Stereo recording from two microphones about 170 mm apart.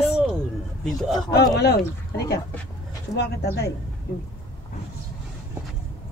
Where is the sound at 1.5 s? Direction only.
75° left (ahead or behind).